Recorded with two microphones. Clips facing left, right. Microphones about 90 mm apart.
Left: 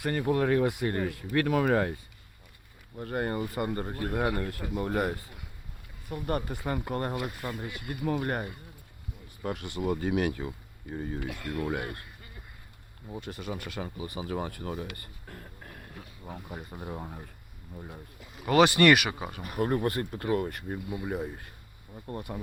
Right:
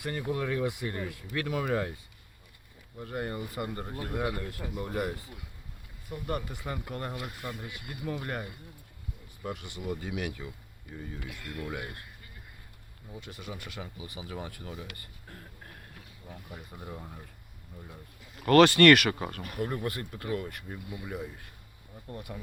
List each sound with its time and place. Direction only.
0.0 s speech: 60° left (ahead or behind)
3.0 s speech: 50° left (ahead or behind)
9.4 s speech: 60° left (ahead or behind)
13.1 s speech: 45° left (ahead or behind)
18.3 s speech: 5° left (ahead or behind)
19.5 s speech: 45° left (ahead or behind)